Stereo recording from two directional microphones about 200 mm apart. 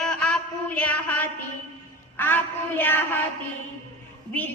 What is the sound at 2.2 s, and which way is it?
Mantra, 10° left (ahead or behind).